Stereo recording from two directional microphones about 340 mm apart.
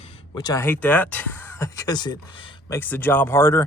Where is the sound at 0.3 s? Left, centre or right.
Centre.